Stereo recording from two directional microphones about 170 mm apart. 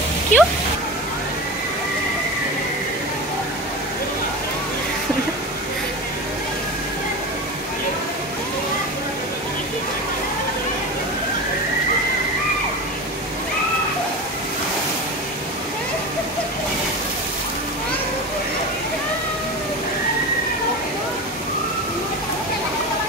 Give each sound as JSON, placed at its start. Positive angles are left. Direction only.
{"t": 0.3, "sound": "speech", "side_deg": 45}